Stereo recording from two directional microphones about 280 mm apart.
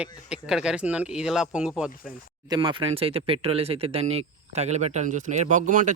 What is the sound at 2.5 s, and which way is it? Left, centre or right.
Speech, centre.